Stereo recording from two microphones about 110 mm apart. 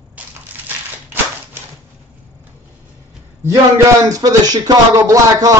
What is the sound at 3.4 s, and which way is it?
Speech, 30° right (ahead or behind).